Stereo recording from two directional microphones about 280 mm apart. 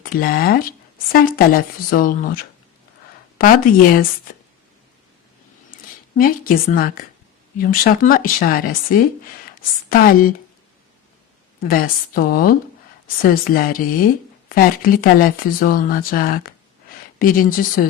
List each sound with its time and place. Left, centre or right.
0.0 s speech: left
6.1 s speech: left
11.7 s speech: left